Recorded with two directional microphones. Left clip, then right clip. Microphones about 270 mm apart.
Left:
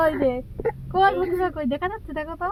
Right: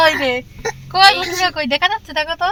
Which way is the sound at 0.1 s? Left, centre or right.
Right.